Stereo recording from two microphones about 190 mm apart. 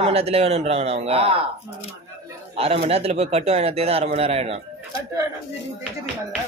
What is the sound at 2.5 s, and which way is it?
A man's voice, 30° right (ahead or behind).